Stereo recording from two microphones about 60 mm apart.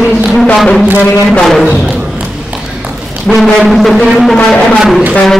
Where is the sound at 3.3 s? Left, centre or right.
Centre.